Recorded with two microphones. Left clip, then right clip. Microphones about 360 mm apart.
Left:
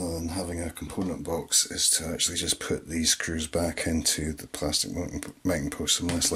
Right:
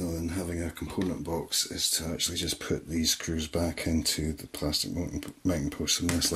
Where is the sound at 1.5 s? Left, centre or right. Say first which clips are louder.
Left 4 dB; centre.